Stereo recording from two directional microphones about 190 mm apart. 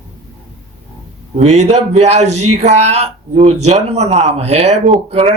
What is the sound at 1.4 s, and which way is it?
Speech, 35° right (ahead or behind).